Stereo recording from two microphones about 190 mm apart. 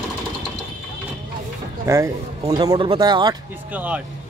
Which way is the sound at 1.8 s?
15° right (ahead or behind).